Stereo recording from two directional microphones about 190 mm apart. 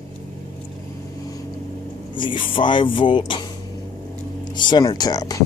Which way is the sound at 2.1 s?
25° left (ahead or behind).